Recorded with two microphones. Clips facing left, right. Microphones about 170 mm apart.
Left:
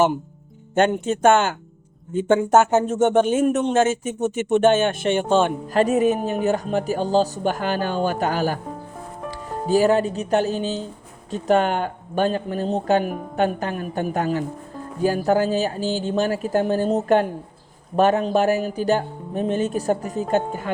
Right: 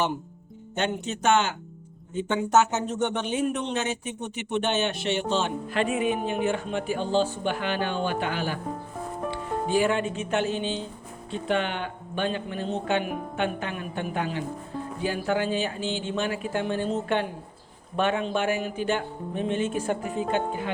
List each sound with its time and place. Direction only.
0.8 s speech: 50° left (ahead or behind)